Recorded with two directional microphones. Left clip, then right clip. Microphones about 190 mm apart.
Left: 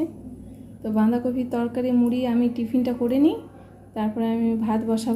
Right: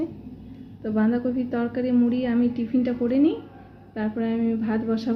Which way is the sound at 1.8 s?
60° left (ahead or behind).